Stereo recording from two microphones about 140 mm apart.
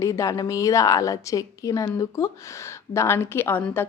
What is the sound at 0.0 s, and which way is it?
A woman's voice, 20° left (ahead or behind).